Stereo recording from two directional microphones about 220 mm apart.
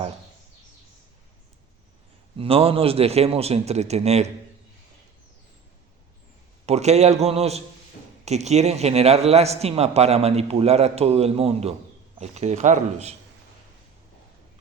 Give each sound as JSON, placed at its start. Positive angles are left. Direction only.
{"t": 2.4, "sound": "a man's voice", "side_deg": -25}
{"t": 6.7, "sound": "a man's voice", "side_deg": -30}